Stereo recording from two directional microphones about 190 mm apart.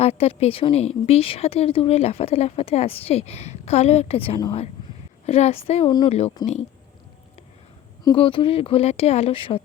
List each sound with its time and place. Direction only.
0.0 s a woman's voice: 30° left (ahead or behind)
8.0 s a woman's voice: 25° left (ahead or behind)